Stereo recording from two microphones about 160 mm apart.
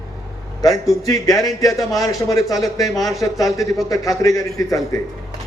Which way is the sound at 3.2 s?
20° left (ahead or behind).